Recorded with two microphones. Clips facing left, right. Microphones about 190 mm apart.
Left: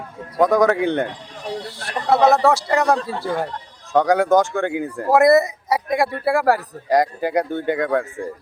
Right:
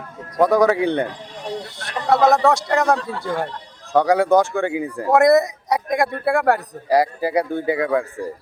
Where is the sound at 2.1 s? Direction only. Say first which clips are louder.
Even; centre (ahead or behind).